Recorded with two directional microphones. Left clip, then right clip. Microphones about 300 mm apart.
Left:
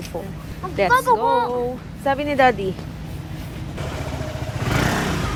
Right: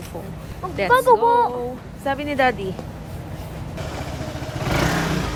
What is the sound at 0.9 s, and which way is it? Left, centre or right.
Speech, right.